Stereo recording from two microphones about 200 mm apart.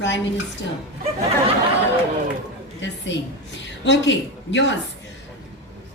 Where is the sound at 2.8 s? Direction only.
65° left (ahead or behind).